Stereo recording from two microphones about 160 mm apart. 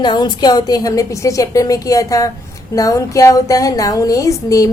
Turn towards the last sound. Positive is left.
turn(degrees=20)  # may be behind; listen again after turning